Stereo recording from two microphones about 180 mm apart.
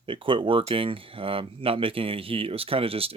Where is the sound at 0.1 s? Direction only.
30° right (ahead or behind).